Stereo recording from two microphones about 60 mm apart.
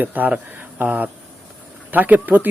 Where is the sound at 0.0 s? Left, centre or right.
Right.